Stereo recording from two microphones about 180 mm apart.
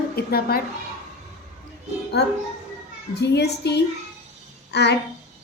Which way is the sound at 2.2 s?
65° left (ahead or behind).